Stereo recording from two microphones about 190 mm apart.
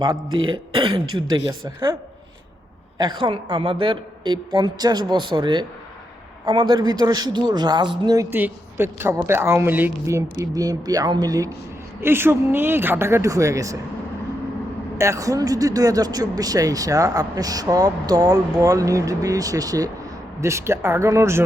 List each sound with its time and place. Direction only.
0.4 s speech: 25° right (ahead or behind)
1.0 s speech: 90° right
1.5 s speech: 25° right (ahead or behind)
3.0 s speech: 25° right (ahead or behind)
14.9 s speech: 15° right (ahead or behind)